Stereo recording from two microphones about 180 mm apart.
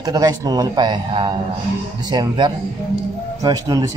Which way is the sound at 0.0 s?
20° right (ahead or behind).